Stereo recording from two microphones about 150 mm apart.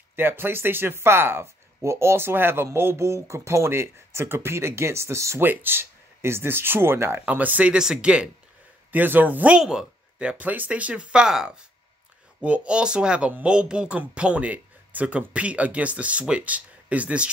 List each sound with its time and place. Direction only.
0.1 s speech: 15° right (ahead or behind)